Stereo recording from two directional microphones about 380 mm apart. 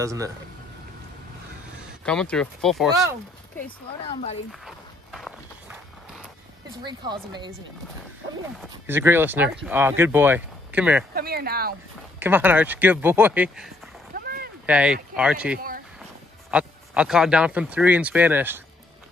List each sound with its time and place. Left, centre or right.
0.0 s speech: centre
2.0 s speech: centre
3.6 s speech: centre
4.5 s walk: centre
6.8 s speech: centre
8.5 s speech: centre
11.1 s speech: right
12.2 s speech: centre
14.1 s boat: right
14.7 s speech: centre